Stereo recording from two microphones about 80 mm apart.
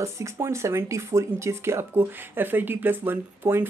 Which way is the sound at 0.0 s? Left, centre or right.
Right.